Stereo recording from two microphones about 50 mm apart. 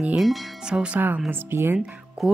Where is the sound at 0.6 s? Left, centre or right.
Right.